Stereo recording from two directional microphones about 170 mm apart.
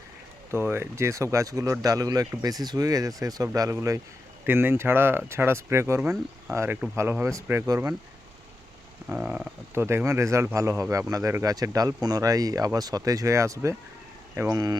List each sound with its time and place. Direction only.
0.5 s speech: 15° right (ahead or behind)
9.0 s speech: 10° right (ahead or behind)